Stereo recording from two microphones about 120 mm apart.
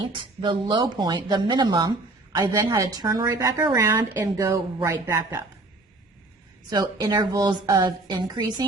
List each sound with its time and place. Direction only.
0.1 s a woman's voice: 40° right (ahead or behind)
6.7 s a woman's voice: 35° right (ahead or behind)